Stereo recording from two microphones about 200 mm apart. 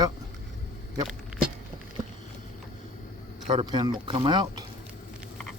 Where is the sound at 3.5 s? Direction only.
25° right (ahead or behind).